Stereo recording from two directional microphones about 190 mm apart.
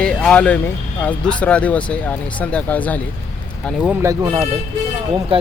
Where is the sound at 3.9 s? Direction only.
15° right (ahead or behind).